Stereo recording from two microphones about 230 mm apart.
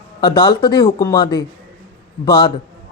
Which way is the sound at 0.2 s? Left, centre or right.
Centre.